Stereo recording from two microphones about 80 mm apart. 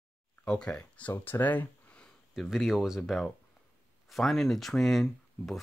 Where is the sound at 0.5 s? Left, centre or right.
Centre.